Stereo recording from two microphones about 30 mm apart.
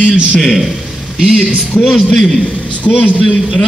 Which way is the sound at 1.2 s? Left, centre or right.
Right.